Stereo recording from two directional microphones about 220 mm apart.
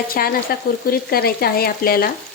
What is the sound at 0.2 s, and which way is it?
Speech, 45° left (ahead or behind).